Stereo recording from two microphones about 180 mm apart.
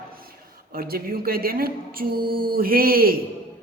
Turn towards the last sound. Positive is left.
turn(degrees=-55)  # may be behind; listen again after turning